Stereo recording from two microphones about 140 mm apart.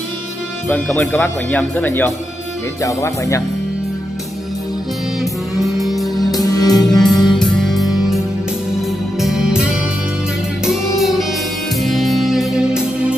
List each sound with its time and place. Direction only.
0.7 s speech: 10° left (ahead or behind)
5.2 s music: centre (ahead or behind)
6.4 s music: 25° left (ahead or behind)
6.9 s music: centre (ahead or behind)
9.2 s music: 5° right (ahead or behind)
11.0 s music: centre (ahead or behind)